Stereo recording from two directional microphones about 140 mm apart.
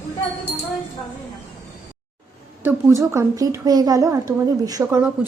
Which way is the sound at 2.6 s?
20° right (ahead or behind).